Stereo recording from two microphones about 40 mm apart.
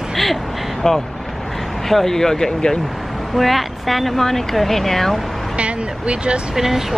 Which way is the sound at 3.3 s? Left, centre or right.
Centre.